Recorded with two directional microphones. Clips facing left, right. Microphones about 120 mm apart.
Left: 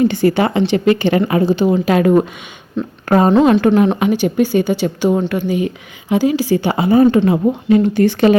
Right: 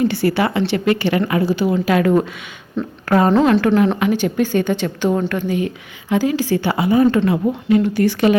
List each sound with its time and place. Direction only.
0.0 s speech: 20° left (ahead or behind)
2.8 s a woman's voice: centre (ahead or behind)
3.1 s a woman's voice: 25° left (ahead or behind)
6.7 s speech: 30° left (ahead or behind)